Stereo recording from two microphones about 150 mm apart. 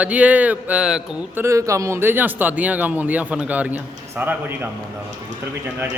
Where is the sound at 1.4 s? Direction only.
20° right (ahead or behind).